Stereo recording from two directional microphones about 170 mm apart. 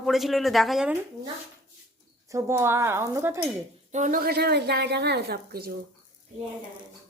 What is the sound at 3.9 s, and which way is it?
A woman's voice, 50° right (ahead or behind).